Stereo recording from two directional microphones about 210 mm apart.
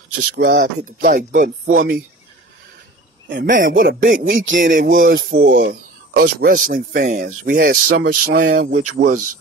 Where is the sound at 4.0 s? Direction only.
40° right (ahead or behind).